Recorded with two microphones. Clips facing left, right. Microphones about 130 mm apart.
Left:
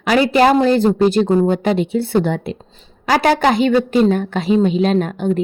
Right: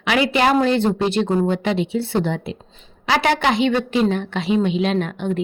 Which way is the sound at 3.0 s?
40° left (ahead or behind).